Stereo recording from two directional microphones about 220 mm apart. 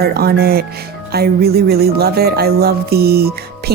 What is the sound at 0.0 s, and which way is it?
Music, 45° right (ahead or behind).